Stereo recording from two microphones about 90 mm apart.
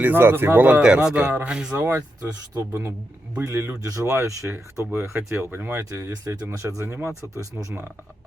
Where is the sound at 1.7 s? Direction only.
25° right (ahead or behind).